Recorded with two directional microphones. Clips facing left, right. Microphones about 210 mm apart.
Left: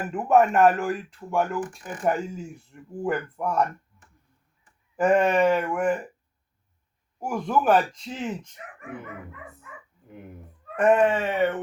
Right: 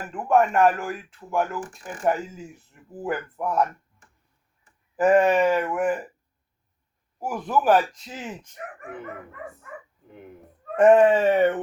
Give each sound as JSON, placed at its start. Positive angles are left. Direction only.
{"t": 0.1, "sound": "speech", "side_deg": 5}
{"t": 4.9, "sound": "speech", "side_deg": -5}
{"t": 7.2, "sound": "speech", "side_deg": -5}
{"t": 8.6, "sound": "speech", "side_deg": -50}
{"t": 10.8, "sound": "speech", "side_deg": -30}